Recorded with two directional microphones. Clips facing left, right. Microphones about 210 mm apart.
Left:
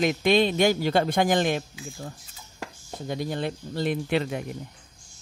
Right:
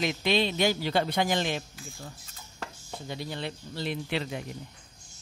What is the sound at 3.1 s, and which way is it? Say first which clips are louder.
A man's voice: left 7 dB; 50° left (ahead or behind).